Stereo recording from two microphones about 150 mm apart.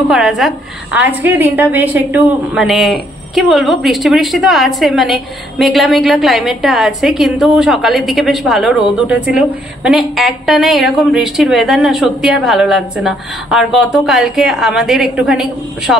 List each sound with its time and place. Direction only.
0.1 s a woman's voice: 5° right (ahead or behind)